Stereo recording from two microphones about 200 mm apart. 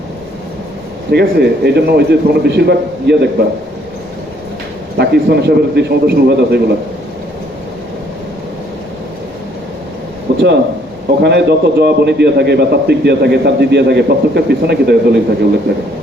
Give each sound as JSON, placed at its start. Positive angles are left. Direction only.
{"t": 1.1, "sound": "a man's voice", "side_deg": -55}
{"t": 4.9, "sound": "a man's voice", "side_deg": -55}
{"t": 10.3, "sound": "a sound", "side_deg": -65}
{"t": 11.2, "sound": "a man's voice", "side_deg": -55}